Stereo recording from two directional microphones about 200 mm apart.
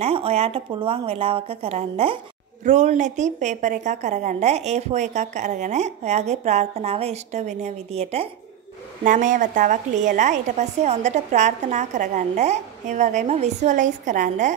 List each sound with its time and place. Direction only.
0.0 s a woman's voice: 30° right (ahead or behind)